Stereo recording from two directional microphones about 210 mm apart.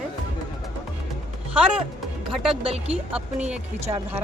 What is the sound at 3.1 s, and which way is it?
Speech, 5° right (ahead or behind).